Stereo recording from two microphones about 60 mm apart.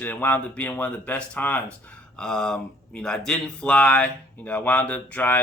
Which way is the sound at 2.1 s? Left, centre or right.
Centre.